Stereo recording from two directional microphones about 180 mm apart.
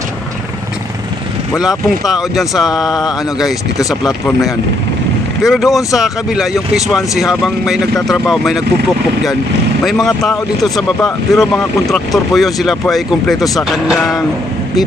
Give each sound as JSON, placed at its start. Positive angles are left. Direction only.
{"t": 1.9, "sound": "speech", "side_deg": 0}
{"t": 2.7, "sound": "a sound", "side_deg": 20}
{"t": 3.0, "sound": "speech", "side_deg": 0}
{"t": 5.4, "sound": "speech", "side_deg": 0}
{"t": 9.8, "sound": "speech", "side_deg": 0}